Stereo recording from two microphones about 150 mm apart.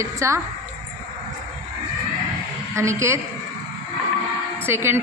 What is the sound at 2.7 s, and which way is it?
Speech, 20° right (ahead or behind).